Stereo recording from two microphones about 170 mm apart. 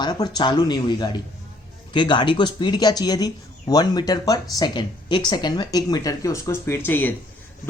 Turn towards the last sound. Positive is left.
turn(degrees=10)  # may be behind; listen again after turning